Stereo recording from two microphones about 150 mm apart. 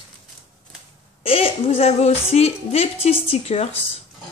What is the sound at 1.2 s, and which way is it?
Speech, 40° left (ahead or behind).